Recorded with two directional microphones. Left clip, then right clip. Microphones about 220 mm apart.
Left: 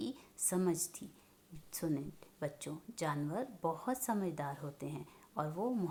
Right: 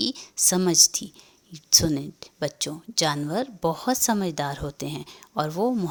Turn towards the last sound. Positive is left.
turn(degrees=-45)  # may be behind; listen again after turning